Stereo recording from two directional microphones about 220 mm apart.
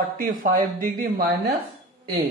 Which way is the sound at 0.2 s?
40° right (ahead or behind).